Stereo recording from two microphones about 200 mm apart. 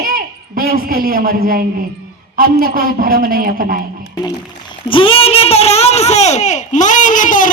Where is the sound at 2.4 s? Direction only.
45° right (ahead or behind).